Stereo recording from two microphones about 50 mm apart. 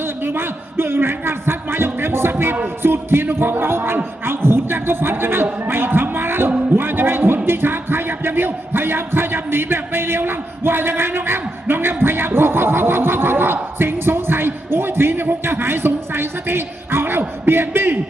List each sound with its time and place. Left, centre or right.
0.0 s a man's voice: right
6.7 s a sound: right
7.4 s speech: right